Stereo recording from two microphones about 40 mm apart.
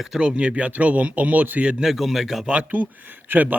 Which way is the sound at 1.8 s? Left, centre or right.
Centre.